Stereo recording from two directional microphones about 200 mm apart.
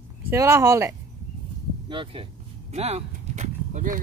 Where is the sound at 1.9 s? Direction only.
25° right (ahead or behind).